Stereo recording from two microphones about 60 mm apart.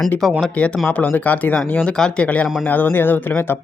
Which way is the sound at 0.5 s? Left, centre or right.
Left.